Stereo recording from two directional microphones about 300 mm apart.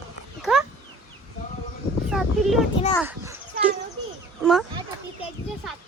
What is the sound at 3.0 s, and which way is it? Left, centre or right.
Children playing, centre.